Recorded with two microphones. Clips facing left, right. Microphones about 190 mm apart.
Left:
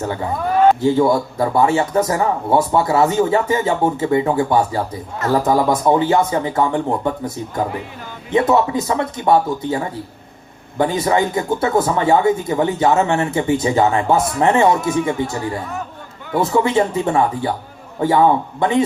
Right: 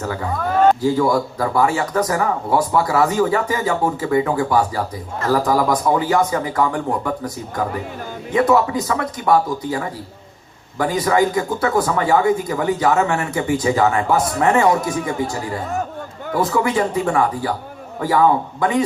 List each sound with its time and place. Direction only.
0.0 s a man's voice: 25° left (ahead or behind)
16.4 s a man's voice: 25° left (ahead or behind)